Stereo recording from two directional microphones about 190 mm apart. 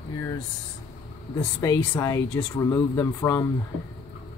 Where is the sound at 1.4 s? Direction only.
20° left (ahead or behind).